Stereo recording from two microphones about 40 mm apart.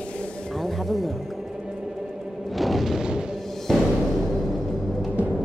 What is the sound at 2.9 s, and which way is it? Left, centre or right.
Music, centre.